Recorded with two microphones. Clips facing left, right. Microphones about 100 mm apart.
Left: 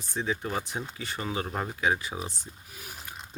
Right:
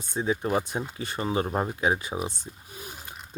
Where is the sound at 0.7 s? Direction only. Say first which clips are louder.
Right 4 dB; 30° right (ahead or behind).